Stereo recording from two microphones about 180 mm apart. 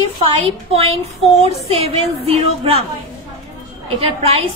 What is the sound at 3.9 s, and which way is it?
Speech, 30° right (ahead or behind).